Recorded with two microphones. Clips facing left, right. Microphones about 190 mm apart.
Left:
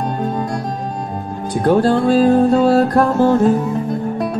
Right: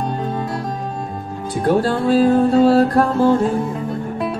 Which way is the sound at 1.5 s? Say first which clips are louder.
Left 3 dB; 40° left (ahead or behind).